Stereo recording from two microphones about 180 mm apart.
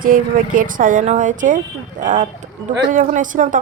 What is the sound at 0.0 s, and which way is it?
A woman's voice, 50° right (ahead or behind).